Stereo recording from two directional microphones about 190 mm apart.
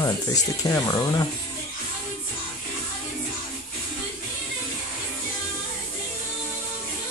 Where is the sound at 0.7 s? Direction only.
20° left (ahead or behind).